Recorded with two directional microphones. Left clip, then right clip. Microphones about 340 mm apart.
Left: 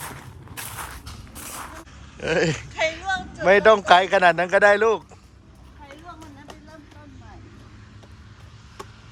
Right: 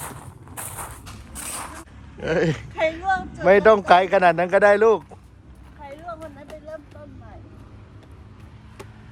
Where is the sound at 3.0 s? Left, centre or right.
Right.